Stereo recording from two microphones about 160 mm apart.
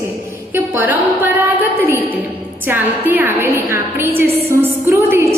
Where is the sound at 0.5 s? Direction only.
10° right (ahead or behind).